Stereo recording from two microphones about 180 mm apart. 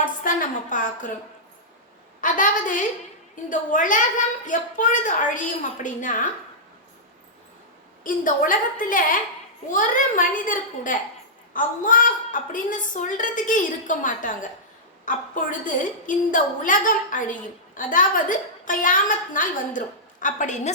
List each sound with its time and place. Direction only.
0.0 s a woman's voice: 50° left (ahead or behind)
2.2 s a woman's voice: 45° left (ahead or behind)
8.0 s a woman's voice: 50° left (ahead or behind)